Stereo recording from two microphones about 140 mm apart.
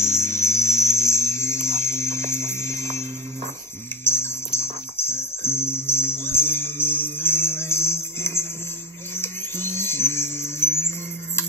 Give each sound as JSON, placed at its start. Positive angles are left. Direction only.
{"t": 0.0, "sound": "music", "side_deg": 20}
{"t": 4.0, "sound": "music", "side_deg": 15}